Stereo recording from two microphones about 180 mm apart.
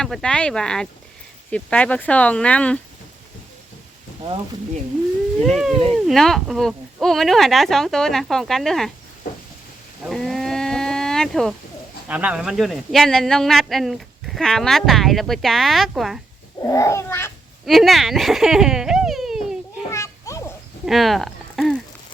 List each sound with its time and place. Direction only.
0.0 s speech: 5° left (ahead or behind)
4.2 s speech: 30° right (ahead or behind)
5.4 s speech: centre (ahead or behind)
10.1 s a sound: centre (ahead or behind)
12.0 s speech: 10° right (ahead or behind)
16.6 s speech: 20° left (ahead or behind)
17.7 s speech: centre (ahead or behind)
19.9 s children playing: 15° left (ahead or behind)
20.8 s a sound: centre (ahead or behind)